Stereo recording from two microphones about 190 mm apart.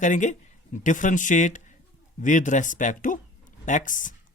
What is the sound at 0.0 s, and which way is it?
Speech, 40° left (ahead or behind).